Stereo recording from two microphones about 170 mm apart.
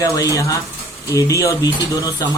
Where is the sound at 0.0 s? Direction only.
20° left (ahead or behind).